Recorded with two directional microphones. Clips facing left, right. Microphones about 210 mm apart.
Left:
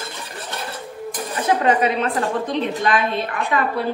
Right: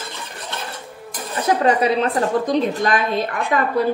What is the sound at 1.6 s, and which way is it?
A woman's voice, 35° right (ahead or behind).